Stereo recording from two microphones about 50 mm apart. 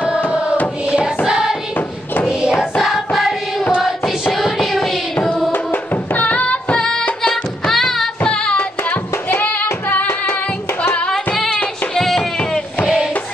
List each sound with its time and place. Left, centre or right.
0.8 s music: centre
2.8 s choir: centre
4.3 s music: centre
5.5 s music: left
6.8 s music: centre
8.2 s singing: centre
8.5 s music: left
11.9 s music: centre
12.2 s a sound: left
12.8 s music: centre